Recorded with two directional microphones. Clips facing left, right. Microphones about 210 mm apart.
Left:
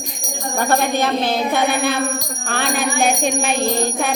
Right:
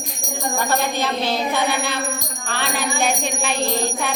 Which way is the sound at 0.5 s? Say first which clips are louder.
Left 5 dB; 50° left (ahead or behind).